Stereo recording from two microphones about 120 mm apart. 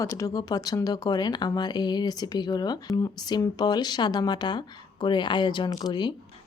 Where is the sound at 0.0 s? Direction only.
30° left (ahead or behind).